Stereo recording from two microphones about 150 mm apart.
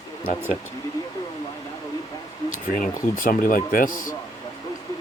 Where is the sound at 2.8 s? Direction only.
70° left (ahead or behind).